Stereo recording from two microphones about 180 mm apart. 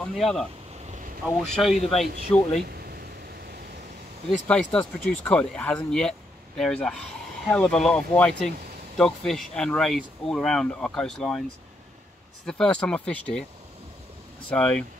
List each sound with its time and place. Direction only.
0.0 s speech: 5° left (ahead or behind)
1.6 s speech: centre (ahead or behind)
2.3 s speech: 15° left (ahead or behind)
2.6 s a sound: 60° right (ahead or behind)
4.5 s speech: 5° left (ahead or behind)
12.4 s speech: 5° left (ahead or behind)
14.5 s speech: 5° left (ahead or behind)